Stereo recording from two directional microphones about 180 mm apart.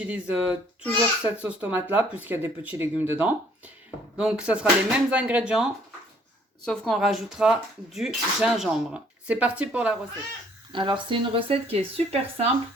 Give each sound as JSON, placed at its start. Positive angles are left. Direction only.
{"t": 0.0, "sound": "speech", "side_deg": -10}
{"t": 6.7, "sound": "speech", "side_deg": 0}
{"t": 10.7, "sound": "speech", "side_deg": -25}